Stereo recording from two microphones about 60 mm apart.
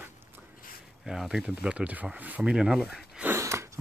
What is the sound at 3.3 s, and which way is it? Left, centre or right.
Sniff, right.